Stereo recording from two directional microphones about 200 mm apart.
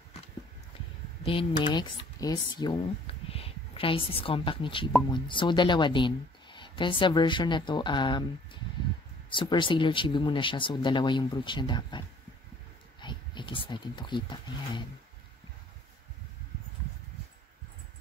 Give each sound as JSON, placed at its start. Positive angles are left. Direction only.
{"t": 1.2, "sound": "speech", "side_deg": 25}
{"t": 9.3, "sound": "speech", "side_deg": 25}
{"t": 13.0, "sound": "speech", "side_deg": 25}